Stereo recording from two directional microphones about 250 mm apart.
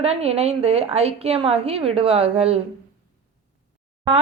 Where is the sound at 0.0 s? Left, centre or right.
Right.